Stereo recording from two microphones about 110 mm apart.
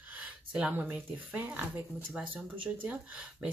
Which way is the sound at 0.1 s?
10° right (ahead or behind).